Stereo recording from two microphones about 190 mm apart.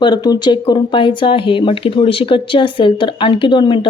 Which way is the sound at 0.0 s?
20° left (ahead or behind).